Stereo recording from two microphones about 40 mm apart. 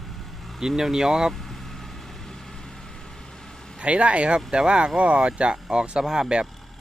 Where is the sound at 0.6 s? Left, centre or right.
Centre.